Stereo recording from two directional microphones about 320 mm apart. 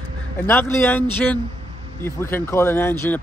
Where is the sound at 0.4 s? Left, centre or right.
Centre.